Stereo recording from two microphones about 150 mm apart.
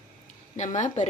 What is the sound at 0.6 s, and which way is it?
Speech, 50° left (ahead or behind).